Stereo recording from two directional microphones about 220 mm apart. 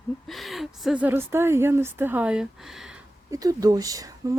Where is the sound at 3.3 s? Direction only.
15° right (ahead or behind).